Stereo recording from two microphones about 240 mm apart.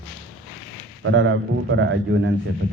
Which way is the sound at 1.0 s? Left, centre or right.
Right.